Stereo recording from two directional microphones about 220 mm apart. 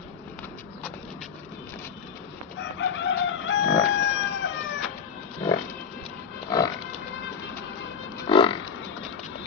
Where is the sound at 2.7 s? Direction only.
55° left (ahead or behind).